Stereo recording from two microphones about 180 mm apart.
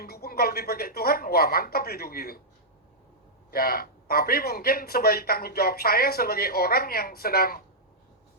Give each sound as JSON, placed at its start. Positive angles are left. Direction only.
{"t": 0.0, "sound": "speech", "side_deg": 55}
{"t": 3.5, "sound": "speech", "side_deg": 55}